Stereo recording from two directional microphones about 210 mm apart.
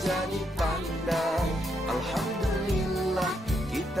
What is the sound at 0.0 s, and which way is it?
Music, centre (ahead or behind).